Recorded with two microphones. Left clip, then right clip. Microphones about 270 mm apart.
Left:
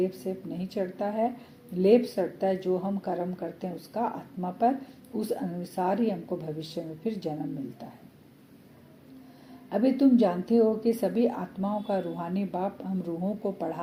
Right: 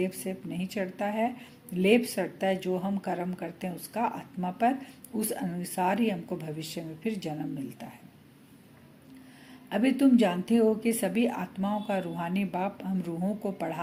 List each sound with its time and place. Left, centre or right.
0.0 s speech: right
9.6 s speech: right